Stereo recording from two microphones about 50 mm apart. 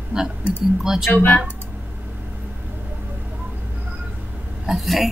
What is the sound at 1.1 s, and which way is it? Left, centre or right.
Speech, left.